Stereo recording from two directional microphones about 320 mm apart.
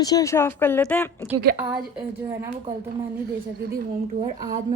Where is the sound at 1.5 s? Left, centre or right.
Centre.